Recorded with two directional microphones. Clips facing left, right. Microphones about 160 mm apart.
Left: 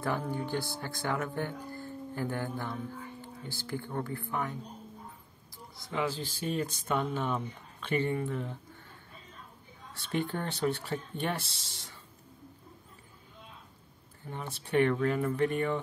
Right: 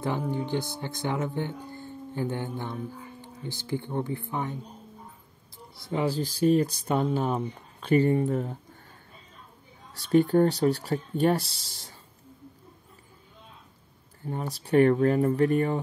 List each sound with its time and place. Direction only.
0.0 s speech: 20° right (ahead or behind); by 8.5 s 40° right (ahead or behind)
9.9 s speech: 40° right (ahead or behind)
14.3 s speech: 40° right (ahead or behind)